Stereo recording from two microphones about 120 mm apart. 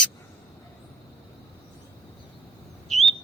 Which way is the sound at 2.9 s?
Centre (ahead or behind).